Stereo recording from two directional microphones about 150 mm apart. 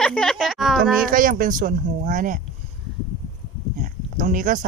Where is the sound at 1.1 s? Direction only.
65° right (ahead or behind).